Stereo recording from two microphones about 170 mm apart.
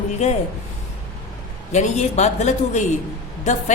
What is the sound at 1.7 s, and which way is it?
A woman's voice, 45° left (ahead or behind).